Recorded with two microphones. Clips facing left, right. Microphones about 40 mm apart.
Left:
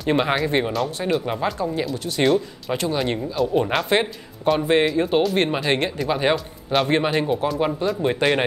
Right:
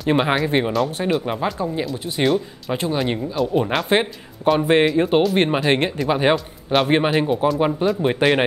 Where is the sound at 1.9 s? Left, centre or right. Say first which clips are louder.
Even; right.